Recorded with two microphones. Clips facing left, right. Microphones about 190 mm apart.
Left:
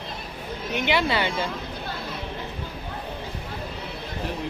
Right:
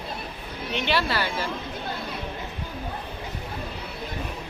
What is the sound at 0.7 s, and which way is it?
Speech, 10° left (ahead or behind).